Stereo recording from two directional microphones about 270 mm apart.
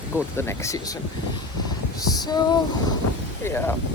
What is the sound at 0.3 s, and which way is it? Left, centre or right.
Speech, centre.